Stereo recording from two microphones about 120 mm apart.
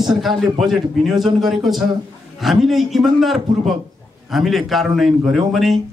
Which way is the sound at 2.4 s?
Centre (ahead or behind).